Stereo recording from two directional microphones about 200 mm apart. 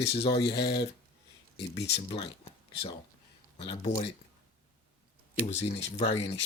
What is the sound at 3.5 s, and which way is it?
Speech, 25° left (ahead or behind).